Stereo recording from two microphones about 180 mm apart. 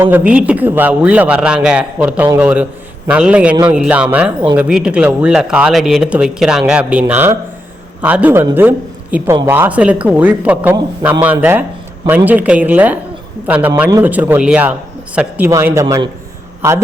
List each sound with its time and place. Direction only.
0.0 s a man's voice: 10° right (ahead or behind)